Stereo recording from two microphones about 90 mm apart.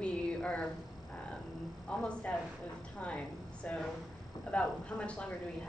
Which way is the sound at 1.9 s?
10° left (ahead or behind).